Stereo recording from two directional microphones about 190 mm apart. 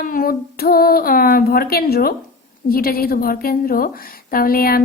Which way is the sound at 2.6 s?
50° left (ahead or behind).